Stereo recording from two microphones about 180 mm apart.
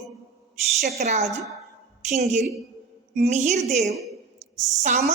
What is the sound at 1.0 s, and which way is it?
Speech, 35° right (ahead or behind).